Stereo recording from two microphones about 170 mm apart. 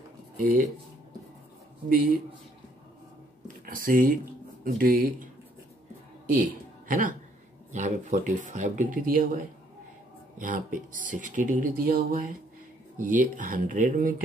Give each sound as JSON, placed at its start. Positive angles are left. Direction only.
{"t": 0.4, "sound": "speech", "side_deg": -55}
{"t": 1.9, "sound": "speech", "side_deg": -55}
{"t": 3.4, "sound": "speech", "side_deg": -55}
{"t": 6.9, "sound": "speech", "side_deg": -50}
{"t": 10.4, "sound": "speech", "side_deg": -50}